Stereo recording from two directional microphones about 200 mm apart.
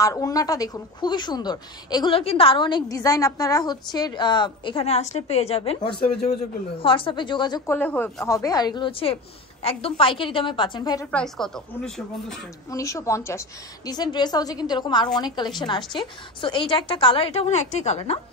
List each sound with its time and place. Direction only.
0.0 s a woman's voice: 15° left (ahead or behind)
11.1 s speech: 5° left (ahead or behind)
12.7 s a woman's voice: 15° left (ahead or behind); by 18.2 s 30° left (ahead or behind)